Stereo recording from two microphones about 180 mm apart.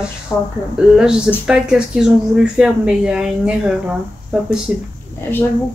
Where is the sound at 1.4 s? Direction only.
5° right (ahead or behind).